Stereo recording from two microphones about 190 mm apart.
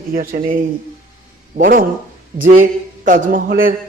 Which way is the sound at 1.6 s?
45° right (ahead or behind).